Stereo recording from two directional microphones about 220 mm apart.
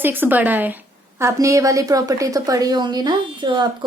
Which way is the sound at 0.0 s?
10° right (ahead or behind).